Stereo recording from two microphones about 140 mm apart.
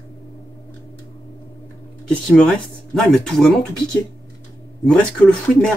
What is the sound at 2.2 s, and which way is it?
Speech, 5° left (ahead or behind).